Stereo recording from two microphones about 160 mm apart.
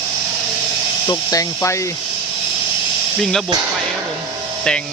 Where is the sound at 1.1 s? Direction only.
20° left (ahead or behind).